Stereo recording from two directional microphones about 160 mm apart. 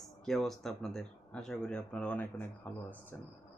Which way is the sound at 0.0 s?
Centre (ahead or behind).